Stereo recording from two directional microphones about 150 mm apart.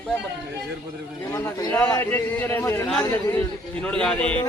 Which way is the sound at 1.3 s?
20° left (ahead or behind).